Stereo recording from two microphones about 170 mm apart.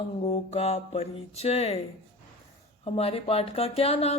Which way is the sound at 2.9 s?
35° left (ahead or behind).